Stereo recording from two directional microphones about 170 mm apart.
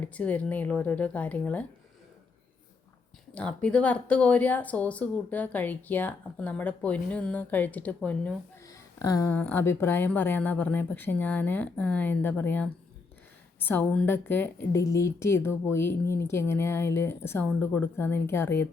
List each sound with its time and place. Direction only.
0.1 s speech: 10° left (ahead or behind)
3.3 s speech: 5° left (ahead or behind)
8.6 s a sound: 20° left (ahead or behind)
9.3 s speech: 10° left (ahead or behind)